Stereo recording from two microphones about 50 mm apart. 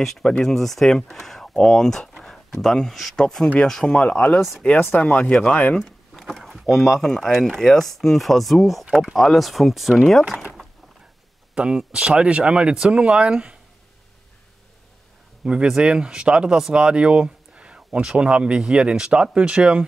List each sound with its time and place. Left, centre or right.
0.0 s speech: centre
4.9 s speech: left
5.2 s speech: centre
5.9 s a sound: centre
6.7 s speech: centre
11.5 s speech: centre
15.4 s speech: centre